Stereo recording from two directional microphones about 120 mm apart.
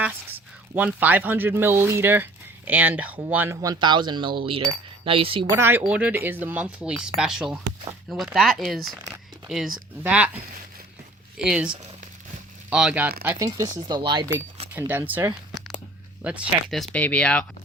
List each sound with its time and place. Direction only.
0.7 s speech: 15° right (ahead or behind)
3.6 s speech: 35° right (ahead or behind)
5.5 s speech: 20° right (ahead or behind)
5.8 s speech: 10° right (ahead or behind)
10.0 s speech: 10° right (ahead or behind)
11.3 s speech: 5° right (ahead or behind)
12.7 s speech: 10° right (ahead or behind)
13.4 s speech: 30° right (ahead or behind)
14.7 s speech: 15° right (ahead or behind)
16.6 s speech: centre (ahead or behind)